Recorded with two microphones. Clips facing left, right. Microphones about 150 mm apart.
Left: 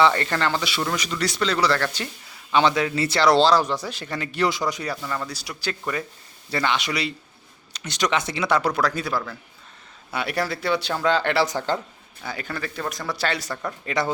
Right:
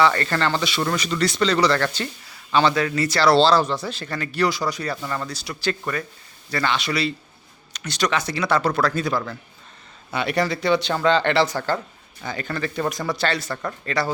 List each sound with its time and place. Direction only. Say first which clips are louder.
0.0 s speech: even; 15° left (ahead or behind)
5.0 s speech: right 1 dB; centre (ahead or behind)
5.3 s speech: right 4 dB; 10° left (ahead or behind)
12.2 s speech: right 3 dB; 5° left (ahead or behind)